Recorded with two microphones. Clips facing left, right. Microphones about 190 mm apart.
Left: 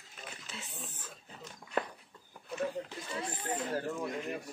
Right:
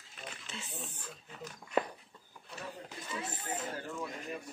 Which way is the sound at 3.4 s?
45° left (ahead or behind).